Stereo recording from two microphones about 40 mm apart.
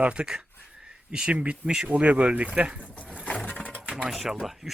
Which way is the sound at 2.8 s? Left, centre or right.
Left.